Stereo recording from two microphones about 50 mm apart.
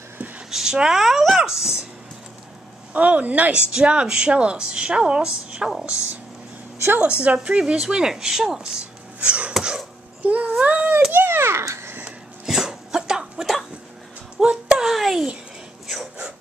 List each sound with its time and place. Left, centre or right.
0.5 s speech: centre
2.9 s a woman's voice: right; by 5.9 s centre
7.4 s speech: right
9.6 s cough: centre
10.2 s child singing: right
10.6 s a sound: right
11.1 s children playing: right
11.6 s babbling: right
12.4 s a sound: centre